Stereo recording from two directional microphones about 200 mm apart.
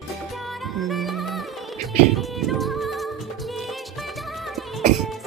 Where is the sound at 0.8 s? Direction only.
Centre (ahead or behind).